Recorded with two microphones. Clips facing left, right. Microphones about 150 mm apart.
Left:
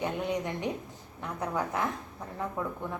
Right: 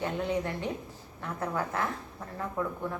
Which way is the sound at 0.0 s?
15° left (ahead or behind).